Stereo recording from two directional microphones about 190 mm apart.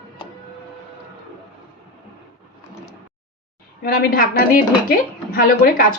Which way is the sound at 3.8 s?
50° left (ahead or behind).